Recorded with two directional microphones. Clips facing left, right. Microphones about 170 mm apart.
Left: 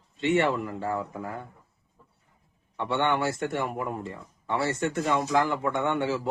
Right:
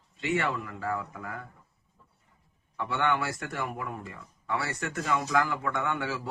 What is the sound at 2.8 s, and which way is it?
Speech, 25° left (ahead or behind).